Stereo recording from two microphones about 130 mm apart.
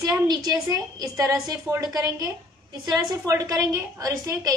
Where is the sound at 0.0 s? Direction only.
30° right (ahead or behind).